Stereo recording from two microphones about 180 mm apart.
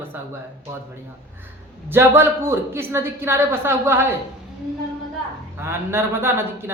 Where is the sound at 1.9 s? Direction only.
15° right (ahead or behind).